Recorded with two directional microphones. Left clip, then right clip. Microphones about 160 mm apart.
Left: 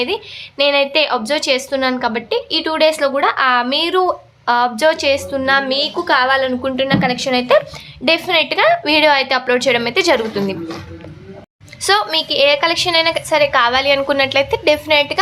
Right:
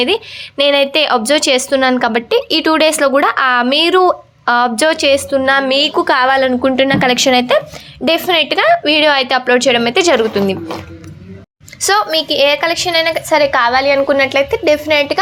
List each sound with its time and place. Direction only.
0.0 s a woman's voice: 35° right (ahead or behind)
6.5 s a woman's voice: 35° right (ahead or behind); by 7.3 s 50° right (ahead or behind)
7.5 s a woman's voice: 20° right (ahead or behind)
8.0 s a woman's voice: 30° right (ahead or behind)
11.8 s a woman's voice: 20° right (ahead or behind)
13.3 s a woman's voice: 35° right (ahead or behind)
13.6 s a woman's voice: 20° right (ahead or behind)